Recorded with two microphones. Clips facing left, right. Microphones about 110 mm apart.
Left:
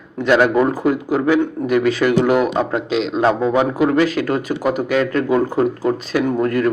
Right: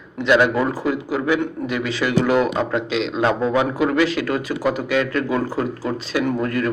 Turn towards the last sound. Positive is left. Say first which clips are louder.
# left 4 dB
turn(degrees=40)  # may be behind; listen again after turning